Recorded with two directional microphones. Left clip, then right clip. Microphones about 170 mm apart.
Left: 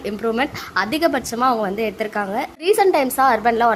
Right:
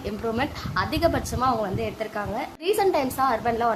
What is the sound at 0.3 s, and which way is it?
A woman's voice, 25° left (ahead or behind).